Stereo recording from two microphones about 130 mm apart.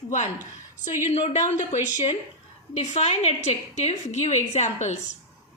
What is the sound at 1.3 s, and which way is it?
A woman's voice, 60° left (ahead or behind).